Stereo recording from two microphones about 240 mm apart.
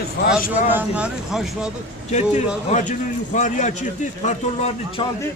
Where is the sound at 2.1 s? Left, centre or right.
Left.